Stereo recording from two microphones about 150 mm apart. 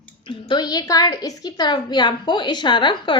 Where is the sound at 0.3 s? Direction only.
30° left (ahead or behind).